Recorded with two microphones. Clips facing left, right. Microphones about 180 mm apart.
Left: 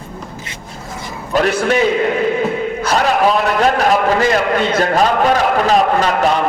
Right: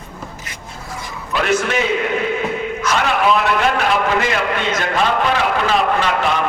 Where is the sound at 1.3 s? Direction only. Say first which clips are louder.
Left 3 dB; 40° left (ahead or behind).